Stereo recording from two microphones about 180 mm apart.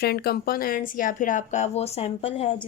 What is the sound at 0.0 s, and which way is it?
A woman's voice, 60° left (ahead or behind).